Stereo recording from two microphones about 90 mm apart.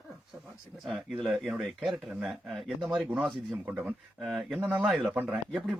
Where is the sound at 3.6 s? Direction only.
15° right (ahead or behind).